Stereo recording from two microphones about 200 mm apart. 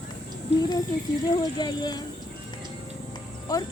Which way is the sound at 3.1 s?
20° left (ahead or behind).